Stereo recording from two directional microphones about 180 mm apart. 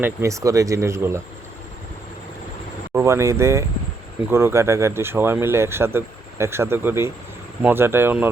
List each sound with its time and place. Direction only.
0.0 s speech: 15° right (ahead or behind)
2.9 s speech: 15° right (ahead or behind)